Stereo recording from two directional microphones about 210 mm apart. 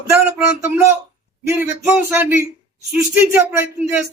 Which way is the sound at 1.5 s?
10° right (ahead or behind).